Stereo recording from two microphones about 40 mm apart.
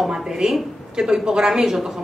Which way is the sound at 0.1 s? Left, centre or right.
Centre.